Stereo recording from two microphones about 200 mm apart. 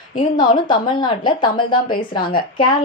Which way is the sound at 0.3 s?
25° left (ahead or behind).